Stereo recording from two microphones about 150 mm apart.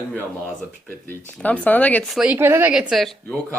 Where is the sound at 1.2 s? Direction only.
10° left (ahead or behind).